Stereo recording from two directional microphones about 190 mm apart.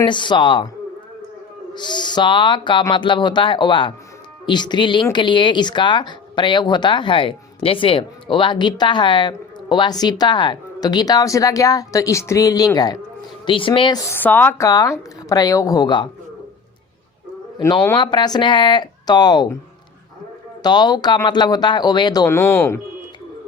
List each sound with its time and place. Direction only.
0.0 s speech: 25° left (ahead or behind)
1.7 s speech: 25° left (ahead or behind)
14.1 s speech: 10° left (ahead or behind)
17.9 s speech: 25° left (ahead or behind)
20.6 s speech: 20° left (ahead or behind)